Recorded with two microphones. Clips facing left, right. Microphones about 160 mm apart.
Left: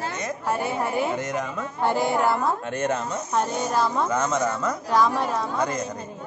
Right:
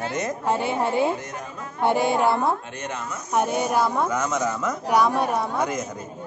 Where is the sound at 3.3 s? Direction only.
15° right (ahead or behind).